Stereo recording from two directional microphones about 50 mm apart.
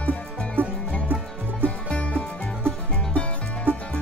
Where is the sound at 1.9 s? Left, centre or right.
Left.